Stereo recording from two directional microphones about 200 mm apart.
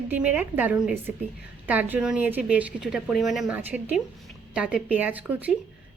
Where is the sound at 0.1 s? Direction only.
10° right (ahead or behind).